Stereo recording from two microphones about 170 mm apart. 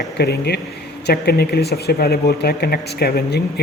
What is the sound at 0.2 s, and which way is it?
Speech, 75° left (ahead or behind).